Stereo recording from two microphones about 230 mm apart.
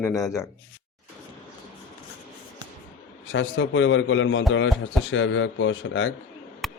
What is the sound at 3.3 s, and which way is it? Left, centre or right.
A man's voice, left.